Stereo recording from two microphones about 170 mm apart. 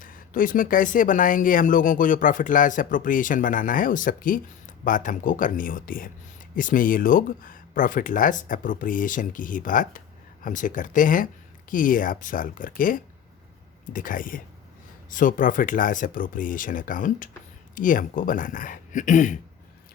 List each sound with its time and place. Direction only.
0.0 s speech: 55° left (ahead or behind)